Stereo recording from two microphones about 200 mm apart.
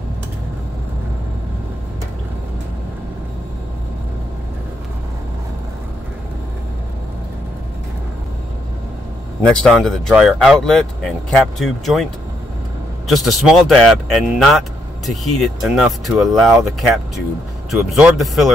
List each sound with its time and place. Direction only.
9.5 s speech: 5° left (ahead or behind)